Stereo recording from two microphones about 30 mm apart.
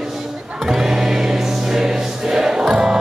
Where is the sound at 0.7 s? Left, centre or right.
Centre.